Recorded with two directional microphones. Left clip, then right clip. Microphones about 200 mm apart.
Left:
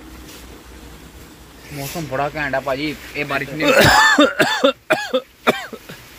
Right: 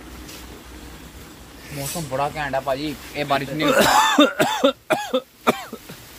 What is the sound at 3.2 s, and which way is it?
Speech, 30° right (ahead or behind).